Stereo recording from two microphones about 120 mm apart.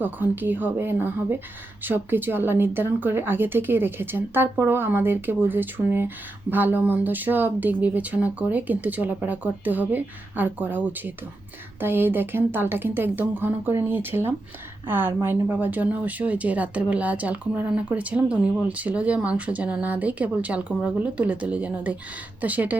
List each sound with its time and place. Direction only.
0.0 s speech: 15° right (ahead or behind)